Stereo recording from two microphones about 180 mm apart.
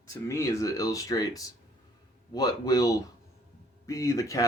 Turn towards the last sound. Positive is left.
turn(degrees=20)  # may be behind; listen again after turning